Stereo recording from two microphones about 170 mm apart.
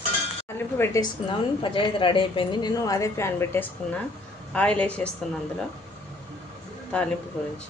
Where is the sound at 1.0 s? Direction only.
30° left (ahead or behind); by 5.1 s 5° left (ahead or behind).